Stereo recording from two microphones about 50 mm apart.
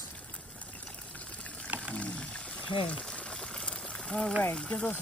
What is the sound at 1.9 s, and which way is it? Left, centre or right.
Boiling, left.